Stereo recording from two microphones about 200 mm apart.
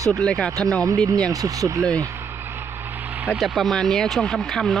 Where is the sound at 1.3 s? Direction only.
15° right (ahead or behind).